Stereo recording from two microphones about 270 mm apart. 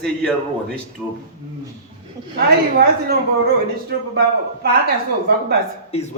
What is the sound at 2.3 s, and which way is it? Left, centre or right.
A woman's voice, right.